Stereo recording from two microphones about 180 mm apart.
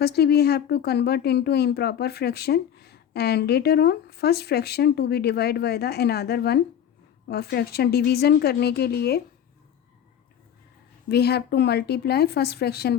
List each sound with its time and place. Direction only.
0.0 s speech: 65° left (ahead or behind)
11.1 s speech: 65° left (ahead or behind)